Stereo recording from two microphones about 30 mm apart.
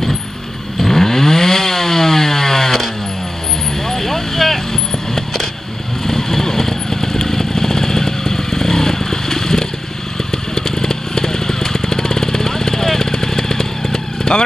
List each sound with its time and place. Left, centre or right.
0.7 s chainsaw: centre
3.8 s vehicle: centre
6.0 s motorcycle: centre
10.5 s vehicle: centre